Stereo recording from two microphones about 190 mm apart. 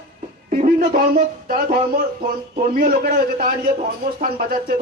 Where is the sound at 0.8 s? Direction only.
45° right (ahead or behind).